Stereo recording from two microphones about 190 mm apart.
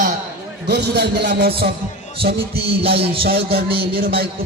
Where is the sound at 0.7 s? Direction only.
60° right (ahead or behind).